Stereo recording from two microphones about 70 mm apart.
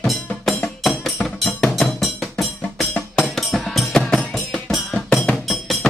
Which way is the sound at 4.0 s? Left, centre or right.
Centre.